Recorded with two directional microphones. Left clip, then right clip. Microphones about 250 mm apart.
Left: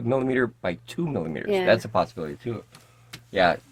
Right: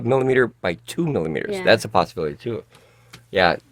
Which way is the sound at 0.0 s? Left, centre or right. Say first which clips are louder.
Right 6 dB; right.